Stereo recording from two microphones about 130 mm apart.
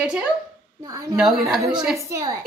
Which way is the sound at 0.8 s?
25° right (ahead or behind).